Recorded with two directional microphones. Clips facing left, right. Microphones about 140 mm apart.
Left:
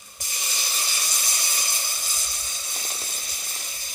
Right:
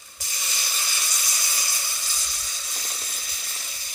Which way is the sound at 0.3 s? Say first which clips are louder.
Left 1 dB; 25° left (ahead or behind).